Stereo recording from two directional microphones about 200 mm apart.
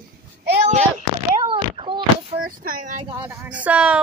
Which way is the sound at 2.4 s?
45° right (ahead or behind).